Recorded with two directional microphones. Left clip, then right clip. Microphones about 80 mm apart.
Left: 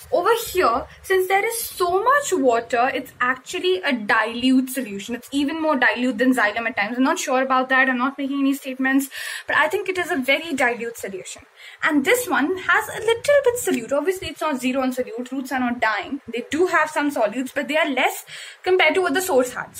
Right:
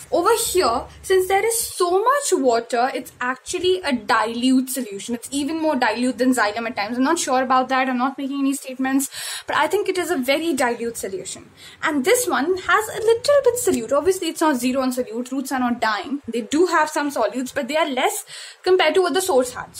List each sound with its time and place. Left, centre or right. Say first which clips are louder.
0.1 s a woman's voice: right 1 dB; right
4.2 s a woman's voice: even; right
5.3 s a woman's voice: left 1 dB; right
5.9 s a woman's voice: left 1 dB; right
12.2 s a woman's voice: right 1 dB; right
14.2 s a woman's voice: right 4 dB; right
14.7 s a woman's voice: right 1 dB; right